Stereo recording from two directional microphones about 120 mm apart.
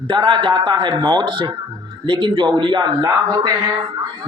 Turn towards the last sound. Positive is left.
turn(degrees=-30)  # may be behind; listen again after turning